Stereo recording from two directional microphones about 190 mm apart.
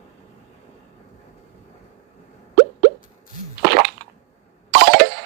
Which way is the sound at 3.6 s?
60° right (ahead or behind).